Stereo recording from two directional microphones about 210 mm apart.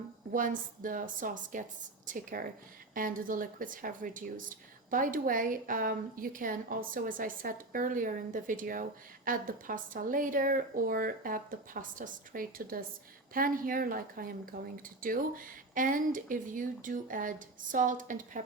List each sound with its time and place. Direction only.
0.3 s a woman's voice: 40° right (ahead or behind)